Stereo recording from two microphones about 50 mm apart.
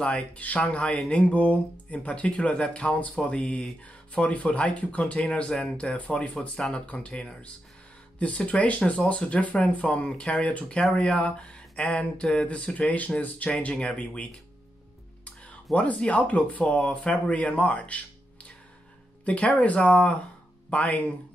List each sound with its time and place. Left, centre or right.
0.0 s speech: left
15.4 s speech: left
19.2 s speech: left